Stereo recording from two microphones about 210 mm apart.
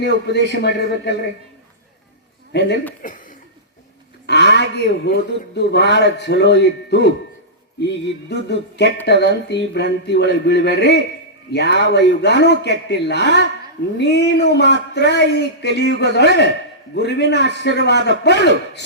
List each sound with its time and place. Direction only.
0.5 s a man's voice: 55° left (ahead or behind)
2.5 s a man's voice: 55° left (ahead or behind)
3.0 s chuckle: 40° left (ahead or behind)
4.3 s a man's voice: 55° left (ahead or behind)